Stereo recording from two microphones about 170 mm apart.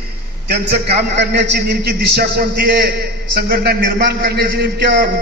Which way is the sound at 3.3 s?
65° right (ahead or behind).